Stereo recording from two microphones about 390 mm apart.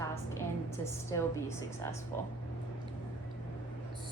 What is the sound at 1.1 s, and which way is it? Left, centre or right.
Speech, centre.